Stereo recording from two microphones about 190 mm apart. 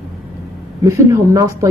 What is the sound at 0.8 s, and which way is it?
Speech, 15° right (ahead or behind).